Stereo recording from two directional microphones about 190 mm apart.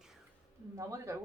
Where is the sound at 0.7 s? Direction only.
15° right (ahead or behind).